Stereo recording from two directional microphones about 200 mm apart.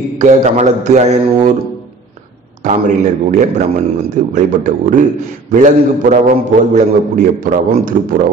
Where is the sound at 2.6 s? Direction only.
40° right (ahead or behind).